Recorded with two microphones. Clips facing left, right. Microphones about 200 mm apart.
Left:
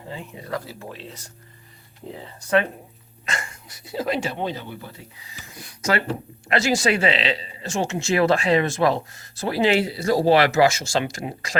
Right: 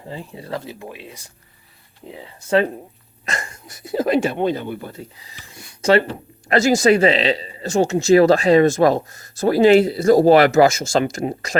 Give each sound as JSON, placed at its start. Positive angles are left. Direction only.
{"t": 0.1, "sound": "speech", "side_deg": -30}
{"t": 3.2, "sound": "speech", "side_deg": -40}
{"t": 5.5, "sound": "speech", "side_deg": -30}
{"t": 6.5, "sound": "speech", "side_deg": -45}